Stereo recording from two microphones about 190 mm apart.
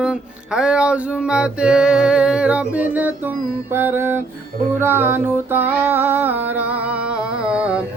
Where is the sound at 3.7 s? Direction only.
10° right (ahead or behind).